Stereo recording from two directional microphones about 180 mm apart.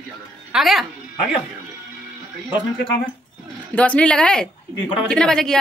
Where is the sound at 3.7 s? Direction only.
5° left (ahead or behind).